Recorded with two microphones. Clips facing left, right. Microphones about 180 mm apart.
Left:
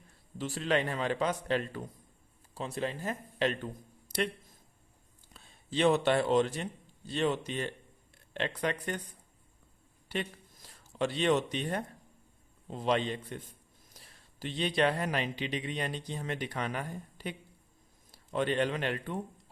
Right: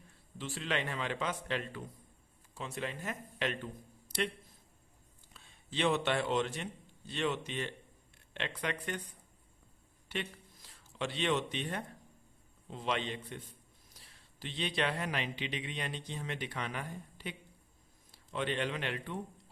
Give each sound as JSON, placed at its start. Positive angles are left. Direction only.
{"t": 0.3, "sound": "speech", "side_deg": 40}
{"t": 4.1, "sound": "a sound", "side_deg": 45}
{"t": 5.3, "sound": "speech", "side_deg": 40}
{"t": 10.1, "sound": "a man's voice", "side_deg": 40}